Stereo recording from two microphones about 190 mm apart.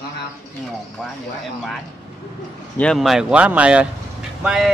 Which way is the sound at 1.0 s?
Centre (ahead or behind).